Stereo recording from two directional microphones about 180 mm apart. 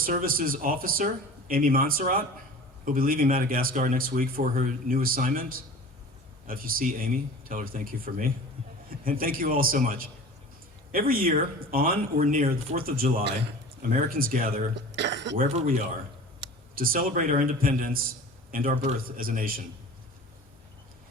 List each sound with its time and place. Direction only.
0.0 s speech: 50° right (ahead or behind); by 15.4 s 75° right (ahead or behind)
15.4 s speech: 45° right (ahead or behind)
16.7 s speech: 50° right (ahead or behind)